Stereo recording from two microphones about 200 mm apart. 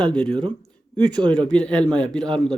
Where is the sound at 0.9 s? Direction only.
20° right (ahead or behind).